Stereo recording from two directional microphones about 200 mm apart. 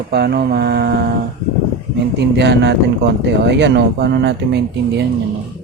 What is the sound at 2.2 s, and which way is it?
Speech, 60° right (ahead or behind).